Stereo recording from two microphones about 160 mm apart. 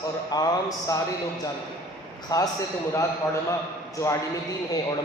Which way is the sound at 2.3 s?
25° left (ahead or behind).